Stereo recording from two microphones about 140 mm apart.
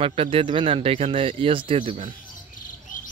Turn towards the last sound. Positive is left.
turn(degrees=75)  # may be behind; listen again after turning